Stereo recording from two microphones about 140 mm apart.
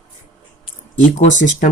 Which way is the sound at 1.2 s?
65° left (ahead or behind).